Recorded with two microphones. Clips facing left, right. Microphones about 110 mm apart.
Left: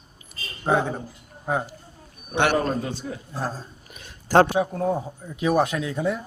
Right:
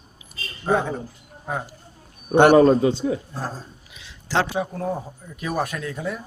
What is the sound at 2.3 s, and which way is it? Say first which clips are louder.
Speech: right 8 dB; 45° right (ahead or behind).